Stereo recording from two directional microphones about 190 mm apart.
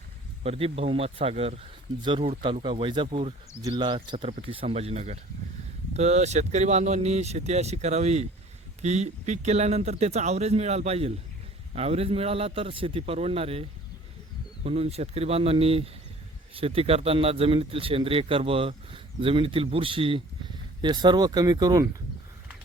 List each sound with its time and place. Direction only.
0.4 s a man's voice: 30° right (ahead or behind)